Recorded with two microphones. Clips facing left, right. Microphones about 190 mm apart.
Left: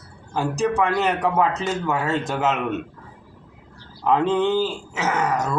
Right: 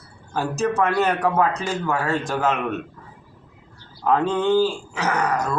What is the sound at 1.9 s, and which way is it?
Speech, 20° left (ahead or behind).